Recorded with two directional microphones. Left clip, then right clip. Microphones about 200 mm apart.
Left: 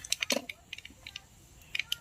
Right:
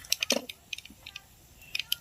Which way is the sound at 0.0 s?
30° left (ahead or behind).